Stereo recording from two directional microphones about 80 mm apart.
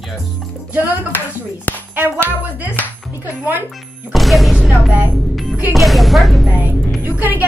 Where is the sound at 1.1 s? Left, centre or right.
Left.